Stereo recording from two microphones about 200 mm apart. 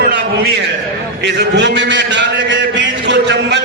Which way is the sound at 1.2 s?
55° right (ahead or behind).